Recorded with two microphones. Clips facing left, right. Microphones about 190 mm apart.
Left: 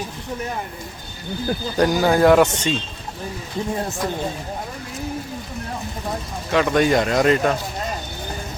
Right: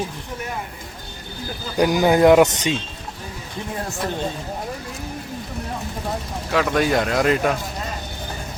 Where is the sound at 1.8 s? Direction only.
15° right (ahead or behind).